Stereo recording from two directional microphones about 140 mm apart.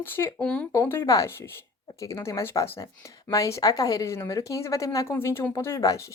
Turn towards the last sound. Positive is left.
turn(degrees=20)  # may be behind; listen again after turning